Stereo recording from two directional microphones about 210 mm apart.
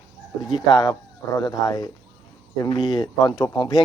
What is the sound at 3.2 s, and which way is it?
Speech, 20° left (ahead or behind).